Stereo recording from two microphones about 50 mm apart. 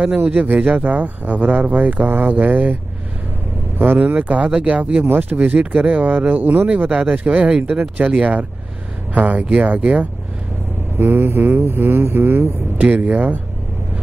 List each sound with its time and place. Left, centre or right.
0.2 s speech: right
4.0 s speech: right
7.1 s speech: right
8.1 s speech: right
11.0 s speech: right
12.8 s speech: right